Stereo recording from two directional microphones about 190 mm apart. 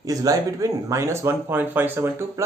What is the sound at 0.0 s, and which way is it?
Speech, 20° right (ahead or behind).